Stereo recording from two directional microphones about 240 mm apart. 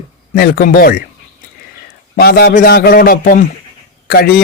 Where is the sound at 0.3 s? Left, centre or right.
Left.